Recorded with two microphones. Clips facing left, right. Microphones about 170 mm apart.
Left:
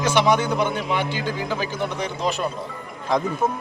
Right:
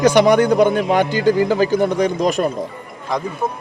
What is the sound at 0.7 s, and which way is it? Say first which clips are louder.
A man's voice: right 8 dB; 45° right (ahead or behind).